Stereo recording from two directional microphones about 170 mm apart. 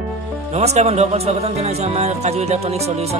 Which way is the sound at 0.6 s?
40° right (ahead or behind).